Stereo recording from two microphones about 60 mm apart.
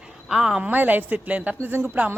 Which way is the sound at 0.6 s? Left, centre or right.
Right.